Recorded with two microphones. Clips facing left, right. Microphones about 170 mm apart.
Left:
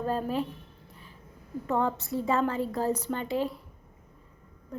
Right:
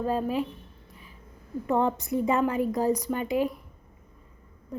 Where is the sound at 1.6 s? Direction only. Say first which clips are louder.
Right 3 dB; 15° right (ahead or behind).